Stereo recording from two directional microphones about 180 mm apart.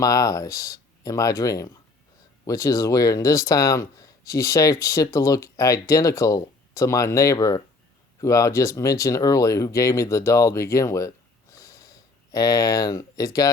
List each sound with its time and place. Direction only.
0.0 s speech: 20° left (ahead or behind)
11.5 s sniff: 20° left (ahead or behind)
12.3 s speech: 20° left (ahead or behind)